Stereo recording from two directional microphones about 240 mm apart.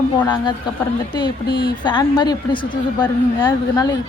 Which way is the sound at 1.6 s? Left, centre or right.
Centre.